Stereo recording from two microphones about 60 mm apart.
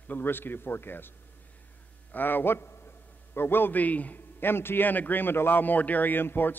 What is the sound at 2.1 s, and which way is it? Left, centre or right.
A man's voice, left.